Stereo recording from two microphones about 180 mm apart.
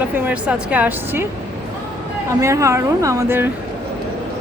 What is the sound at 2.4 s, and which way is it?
Speech, 15° right (ahead or behind).